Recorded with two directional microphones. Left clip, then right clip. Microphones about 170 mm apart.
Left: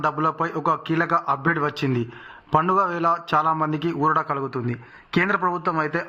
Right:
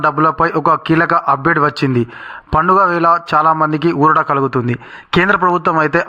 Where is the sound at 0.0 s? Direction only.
35° right (ahead or behind).